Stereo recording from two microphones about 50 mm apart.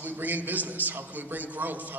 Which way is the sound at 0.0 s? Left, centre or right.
Right.